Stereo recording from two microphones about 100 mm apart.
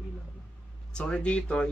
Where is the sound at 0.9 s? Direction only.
10° left (ahead or behind).